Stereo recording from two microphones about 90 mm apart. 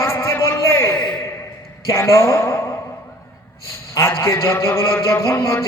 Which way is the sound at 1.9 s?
30° left (ahead or behind).